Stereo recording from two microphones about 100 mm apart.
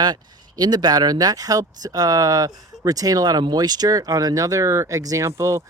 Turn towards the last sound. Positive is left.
turn(degrees=-30)  # may be behind; listen again after turning